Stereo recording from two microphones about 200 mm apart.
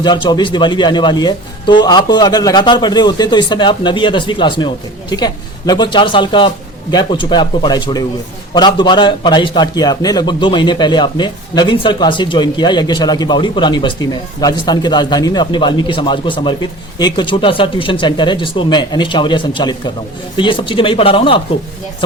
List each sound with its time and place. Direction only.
0.0 s a man's voice: 20° left (ahead or behind)